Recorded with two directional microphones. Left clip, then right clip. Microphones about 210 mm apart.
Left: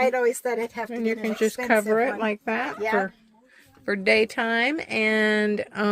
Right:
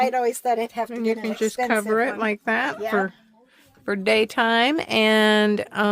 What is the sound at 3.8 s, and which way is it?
Speech, 20° right (ahead or behind).